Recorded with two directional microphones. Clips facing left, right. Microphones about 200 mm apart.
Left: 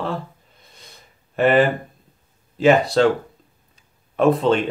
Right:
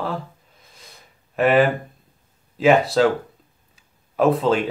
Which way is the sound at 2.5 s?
Centre (ahead or behind).